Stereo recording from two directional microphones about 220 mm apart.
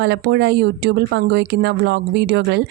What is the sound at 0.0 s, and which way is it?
Speech, 50° right (ahead or behind).